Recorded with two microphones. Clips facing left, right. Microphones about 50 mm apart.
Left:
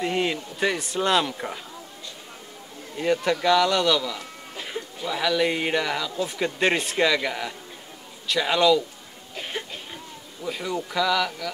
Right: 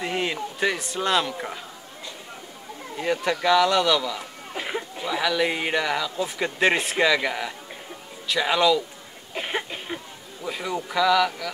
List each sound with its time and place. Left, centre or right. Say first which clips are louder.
0.0 s a sound: left 1 dB; centre
1.3 s speech: even; centre
3.0 s speech: left 2 dB; centre
4.2 s chuckle: right 4 dB; right
5.0 s speech: left 1 dB; centre
9.3 s a sound: right 4 dB; right
10.4 s speech: even; centre